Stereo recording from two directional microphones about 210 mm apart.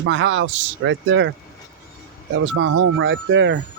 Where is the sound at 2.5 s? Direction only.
65° right (ahead or behind).